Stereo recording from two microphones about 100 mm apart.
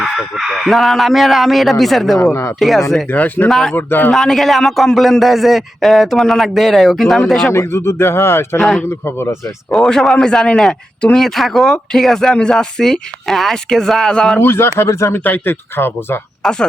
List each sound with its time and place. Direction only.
0.0 s a man's voice: 5° right (ahead or behind)
3.1 s speech: 15° left (ahead or behind)
3.5 s a man's voice: 5° left (ahead or behind)
3.8 s speech: 20° left (ahead or behind)
4.1 s a man's voice: 5° left (ahead or behind)
7.5 s speech: 25° left (ahead or behind)
8.5 s a man's voice: 5° left (ahead or behind)
14.3 s speech: 25° left (ahead or behind)
16.4 s speech: 5° left (ahead or behind)